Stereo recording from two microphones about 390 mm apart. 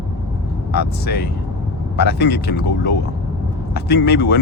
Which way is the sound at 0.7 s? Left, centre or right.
Left.